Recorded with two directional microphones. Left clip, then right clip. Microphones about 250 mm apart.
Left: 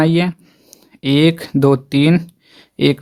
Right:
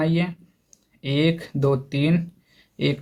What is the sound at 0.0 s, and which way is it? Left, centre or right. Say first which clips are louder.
Speech: left 9 dB; left.